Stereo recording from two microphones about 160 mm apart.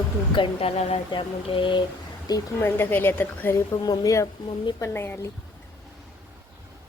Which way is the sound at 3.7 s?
25° left (ahead or behind).